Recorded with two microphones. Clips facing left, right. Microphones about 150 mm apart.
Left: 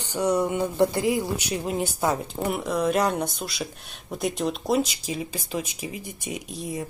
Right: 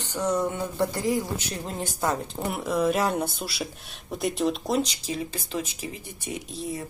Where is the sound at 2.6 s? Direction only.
Centre (ahead or behind).